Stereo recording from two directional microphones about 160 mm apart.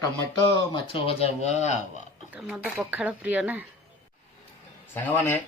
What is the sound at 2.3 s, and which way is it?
Speech, 5° right (ahead or behind).